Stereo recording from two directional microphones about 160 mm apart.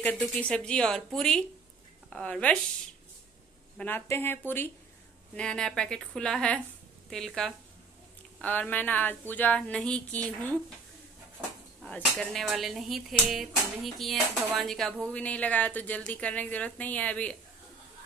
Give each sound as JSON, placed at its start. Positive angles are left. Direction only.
{"t": 0.0, "sound": "a woman's voice", "side_deg": 10}
{"t": 3.7, "sound": "speech", "side_deg": 10}
{"t": 11.8, "sound": "speech", "side_deg": 5}